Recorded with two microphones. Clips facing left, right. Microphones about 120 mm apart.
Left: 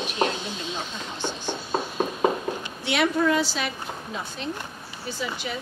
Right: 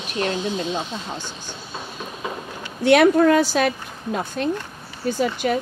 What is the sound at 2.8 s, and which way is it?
A woman's voice, 50° right (ahead or behind).